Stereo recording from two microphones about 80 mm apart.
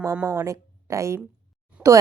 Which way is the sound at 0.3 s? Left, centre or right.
Right.